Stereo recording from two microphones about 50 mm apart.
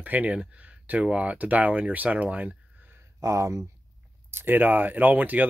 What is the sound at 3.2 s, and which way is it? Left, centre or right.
Speech, right.